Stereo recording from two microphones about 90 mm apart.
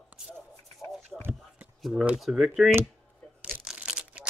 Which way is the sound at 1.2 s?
20° right (ahead or behind).